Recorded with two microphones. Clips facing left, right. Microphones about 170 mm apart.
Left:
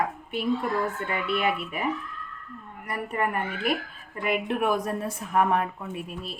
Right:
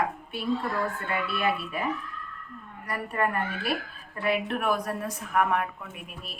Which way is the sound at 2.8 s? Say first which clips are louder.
Even; 20° left (ahead or behind).